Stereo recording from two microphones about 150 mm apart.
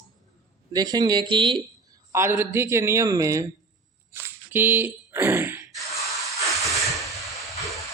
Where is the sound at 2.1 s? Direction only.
20° right (ahead or behind).